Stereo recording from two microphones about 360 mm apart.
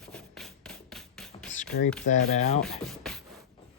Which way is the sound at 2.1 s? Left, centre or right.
Centre.